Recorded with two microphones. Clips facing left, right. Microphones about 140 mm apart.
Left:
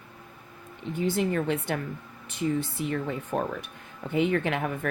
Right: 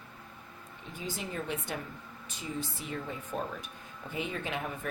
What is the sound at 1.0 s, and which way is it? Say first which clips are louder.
Speech: left 11 dB; 65° left (ahead or behind).